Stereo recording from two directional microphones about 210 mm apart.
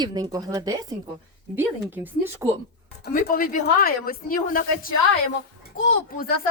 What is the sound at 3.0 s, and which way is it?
A woman's voice, 45° left (ahead or behind).